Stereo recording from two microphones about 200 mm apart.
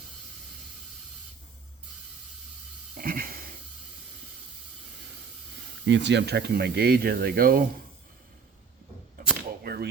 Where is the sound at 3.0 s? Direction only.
45° right (ahead or behind).